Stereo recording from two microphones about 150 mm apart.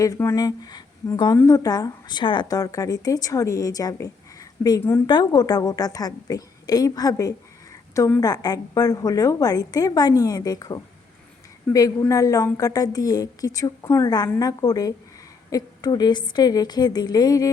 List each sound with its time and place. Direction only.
0.0 s a woman's voice: 20° left (ahead or behind)